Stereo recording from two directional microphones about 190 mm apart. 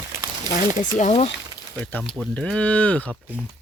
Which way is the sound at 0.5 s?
40° left (ahead or behind).